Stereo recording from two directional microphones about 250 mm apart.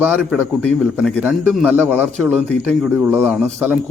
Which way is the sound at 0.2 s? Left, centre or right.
Centre.